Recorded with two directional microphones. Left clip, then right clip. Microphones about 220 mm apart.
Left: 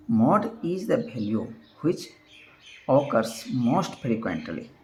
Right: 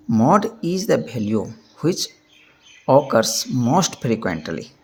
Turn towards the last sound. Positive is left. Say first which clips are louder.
# right 6 dB
turn(degrees=-50)  # may be behind; listen again after turning